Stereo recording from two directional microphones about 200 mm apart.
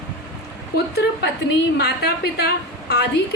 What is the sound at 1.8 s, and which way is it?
Speech, 50° left (ahead or behind).